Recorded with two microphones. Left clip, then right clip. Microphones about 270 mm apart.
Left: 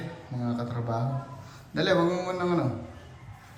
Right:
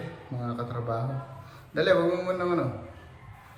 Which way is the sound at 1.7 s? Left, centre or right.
Centre.